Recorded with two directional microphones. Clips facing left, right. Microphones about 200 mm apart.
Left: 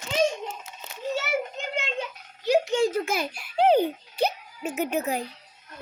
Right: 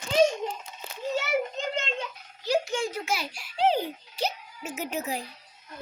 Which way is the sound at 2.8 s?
50° left (ahead or behind).